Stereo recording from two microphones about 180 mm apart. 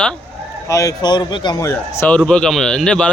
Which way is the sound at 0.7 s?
20° left (ahead or behind).